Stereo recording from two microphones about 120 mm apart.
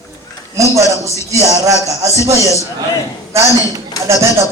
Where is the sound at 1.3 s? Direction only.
25° right (ahead or behind).